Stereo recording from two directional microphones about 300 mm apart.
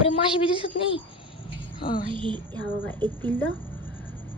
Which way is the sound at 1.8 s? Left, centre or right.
Left.